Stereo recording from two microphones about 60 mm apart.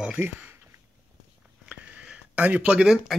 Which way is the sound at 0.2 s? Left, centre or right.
Right.